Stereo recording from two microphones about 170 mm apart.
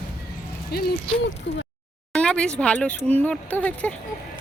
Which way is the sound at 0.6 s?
65° left (ahead or behind).